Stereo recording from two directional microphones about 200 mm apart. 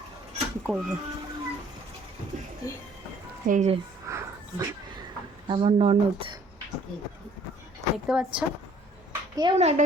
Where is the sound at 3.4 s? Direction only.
40° right (ahead or behind).